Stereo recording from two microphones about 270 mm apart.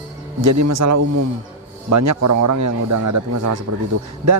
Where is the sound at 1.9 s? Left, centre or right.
Right.